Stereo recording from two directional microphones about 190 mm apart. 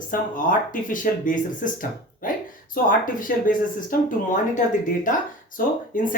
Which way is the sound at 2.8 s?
45° left (ahead or behind).